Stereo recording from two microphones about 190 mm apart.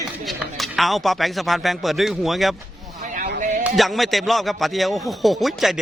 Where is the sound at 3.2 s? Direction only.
50° right (ahead or behind).